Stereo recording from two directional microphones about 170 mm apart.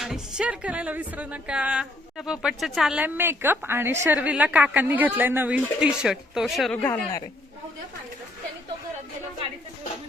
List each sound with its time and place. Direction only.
0.0 s a woman's voice: 5° right (ahead or behind)
6.8 s a man's voice: 15° left (ahead or behind)